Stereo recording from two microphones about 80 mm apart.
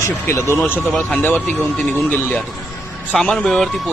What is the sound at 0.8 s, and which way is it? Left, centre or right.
Speech, centre.